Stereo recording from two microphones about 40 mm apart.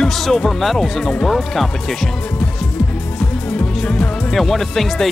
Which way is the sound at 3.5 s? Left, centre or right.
Left.